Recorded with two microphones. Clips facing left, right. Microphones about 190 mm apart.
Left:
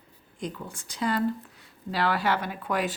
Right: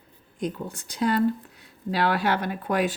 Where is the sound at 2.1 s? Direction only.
55° right (ahead or behind).